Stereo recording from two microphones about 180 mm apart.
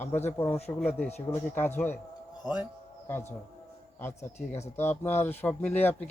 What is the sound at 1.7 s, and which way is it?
Speech, 10° left (ahead or behind).